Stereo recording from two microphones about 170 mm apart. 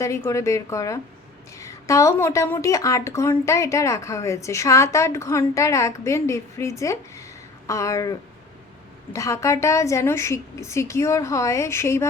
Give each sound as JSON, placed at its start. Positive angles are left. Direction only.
{"t": 0.0, "sound": "a woman's voice", "side_deg": 15}
{"t": 9.1, "sound": "a woman's voice", "side_deg": 20}